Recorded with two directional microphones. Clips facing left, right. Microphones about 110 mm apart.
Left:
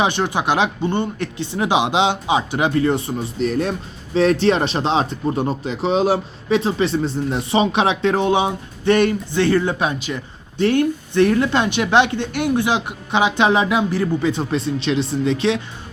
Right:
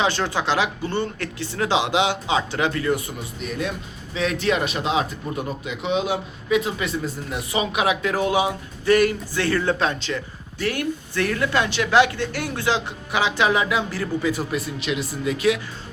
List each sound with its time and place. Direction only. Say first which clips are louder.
0.0 s speech: left 3 dB; 20° left (ahead or behind)
10.6 s speech: left 8 dB; 25° left (ahead or behind)